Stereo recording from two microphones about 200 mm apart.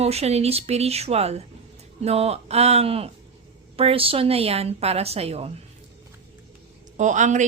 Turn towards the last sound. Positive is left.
turn(degrees=-40)  # may be behind; listen again after turning